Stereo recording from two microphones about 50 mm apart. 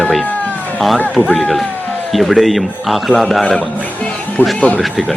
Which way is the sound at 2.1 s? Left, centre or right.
Centre.